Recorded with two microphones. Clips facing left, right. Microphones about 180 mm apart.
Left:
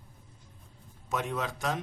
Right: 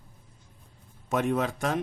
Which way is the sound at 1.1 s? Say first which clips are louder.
Right 6 dB; 55° right (ahead or behind).